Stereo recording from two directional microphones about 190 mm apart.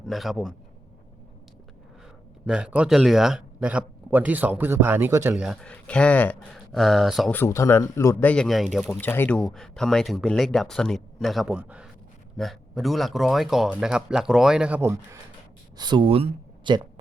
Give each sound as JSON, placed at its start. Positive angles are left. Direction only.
{"t": 0.0, "sound": "speech", "side_deg": 0}
{"t": 2.5, "sound": "speech", "side_deg": -5}
{"t": 7.3, "sound": "a man's voice", "side_deg": 15}
{"t": 9.0, "sound": "speech", "side_deg": 10}
{"t": 15.8, "sound": "speech", "side_deg": -25}